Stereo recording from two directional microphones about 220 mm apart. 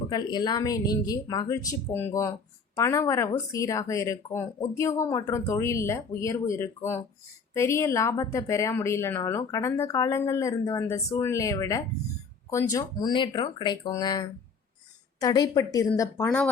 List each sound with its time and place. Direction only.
0.1 s a woman's voice: 20° left (ahead or behind)